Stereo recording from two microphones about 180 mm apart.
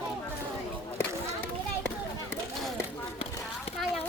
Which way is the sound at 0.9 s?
10° left (ahead or behind).